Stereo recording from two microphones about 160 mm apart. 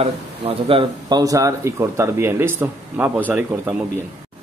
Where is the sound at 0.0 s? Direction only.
35° right (ahead or behind); by 3.1 s 15° right (ahead or behind).